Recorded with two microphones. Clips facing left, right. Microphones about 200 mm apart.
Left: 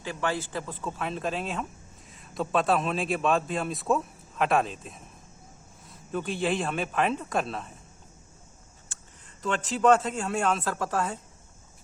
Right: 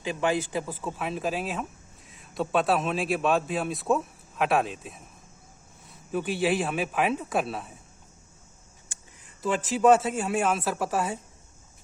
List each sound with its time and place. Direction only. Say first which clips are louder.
0.0 s a man's voice: right 4 dB; 15° right (ahead or behind)
8.9 s a man's voice: even; 10° right (ahead or behind)